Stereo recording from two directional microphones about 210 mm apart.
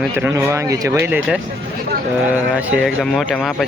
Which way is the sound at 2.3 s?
5° right (ahead or behind).